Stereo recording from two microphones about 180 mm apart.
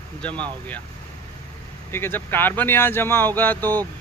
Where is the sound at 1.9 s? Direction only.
10° left (ahead or behind).